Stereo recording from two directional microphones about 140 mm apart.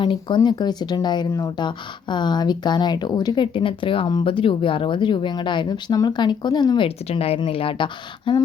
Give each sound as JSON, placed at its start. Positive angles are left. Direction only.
{"t": 0.0, "sound": "speech", "side_deg": 35}